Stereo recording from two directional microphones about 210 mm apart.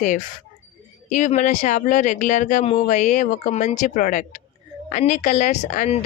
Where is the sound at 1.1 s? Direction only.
35° left (ahead or behind).